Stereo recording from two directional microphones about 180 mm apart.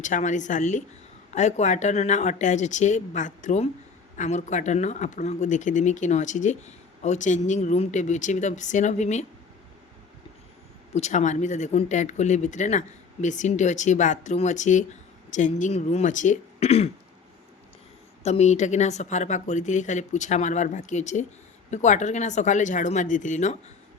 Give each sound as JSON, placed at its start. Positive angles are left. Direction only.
{"t": 0.0, "sound": "speech", "side_deg": 45}
{"t": 10.9, "sound": "speech", "side_deg": 40}
{"t": 18.2, "sound": "speech", "side_deg": 40}